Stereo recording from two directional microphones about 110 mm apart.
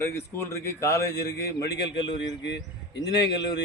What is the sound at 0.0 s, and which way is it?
A man's voice, 25° left (ahead or behind).